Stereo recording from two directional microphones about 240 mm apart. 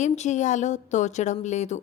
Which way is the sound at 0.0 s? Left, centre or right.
Left.